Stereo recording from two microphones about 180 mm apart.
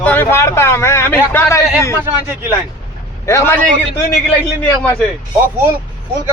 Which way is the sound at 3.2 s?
15° left (ahead or behind).